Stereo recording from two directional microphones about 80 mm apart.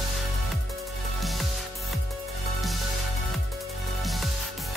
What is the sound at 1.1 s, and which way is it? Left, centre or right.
Music, centre.